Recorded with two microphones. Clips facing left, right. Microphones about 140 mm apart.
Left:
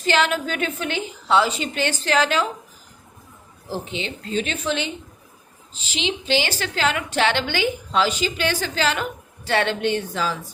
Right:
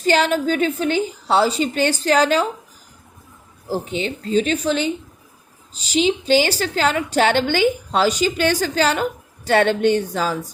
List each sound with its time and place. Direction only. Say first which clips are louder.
0.0 s a woman's voice: right 4 dB; 40° right (ahead or behind)
3.7 s a woman's voice: right 5 dB; 40° right (ahead or behind)